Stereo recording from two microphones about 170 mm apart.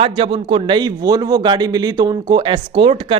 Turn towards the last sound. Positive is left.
turn(degrees=-30)  # may be behind; listen again after turning